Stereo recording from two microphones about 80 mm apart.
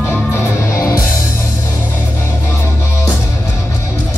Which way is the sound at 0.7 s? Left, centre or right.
Left.